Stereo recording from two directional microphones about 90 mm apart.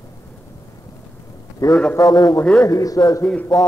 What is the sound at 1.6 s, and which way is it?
A man's voice, 40° left (ahead or behind).